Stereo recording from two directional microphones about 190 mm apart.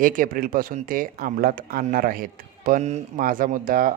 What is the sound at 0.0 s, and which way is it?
Speech, 45° right (ahead or behind).